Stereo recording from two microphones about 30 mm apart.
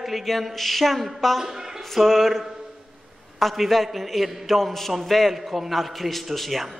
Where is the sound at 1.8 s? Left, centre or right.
Centre.